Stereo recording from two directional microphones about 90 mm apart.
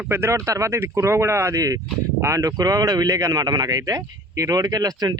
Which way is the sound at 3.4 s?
50° right (ahead or behind).